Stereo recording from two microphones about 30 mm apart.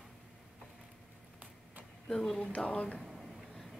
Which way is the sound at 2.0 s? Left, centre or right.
Centre.